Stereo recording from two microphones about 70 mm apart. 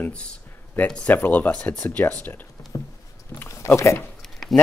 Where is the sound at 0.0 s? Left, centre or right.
Centre.